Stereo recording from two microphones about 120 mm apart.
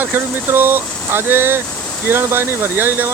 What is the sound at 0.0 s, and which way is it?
Speech, 15° right (ahead or behind).